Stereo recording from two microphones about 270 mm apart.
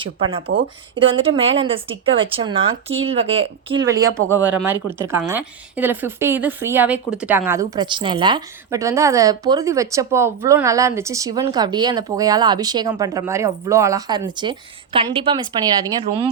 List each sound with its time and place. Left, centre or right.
0.0 s a woman's voice: centre